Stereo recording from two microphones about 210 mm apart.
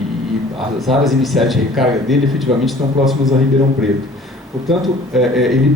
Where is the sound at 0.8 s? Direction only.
Centre (ahead or behind).